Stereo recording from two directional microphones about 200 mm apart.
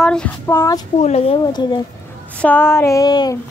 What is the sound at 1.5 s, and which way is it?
Speech, 20° left (ahead or behind).